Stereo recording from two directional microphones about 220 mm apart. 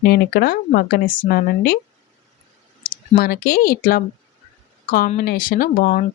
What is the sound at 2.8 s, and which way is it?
Speech, 40° left (ahead or behind).